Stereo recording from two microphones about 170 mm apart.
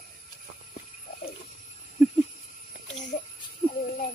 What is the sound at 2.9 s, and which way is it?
Jingle bell, 45° left (ahead or behind).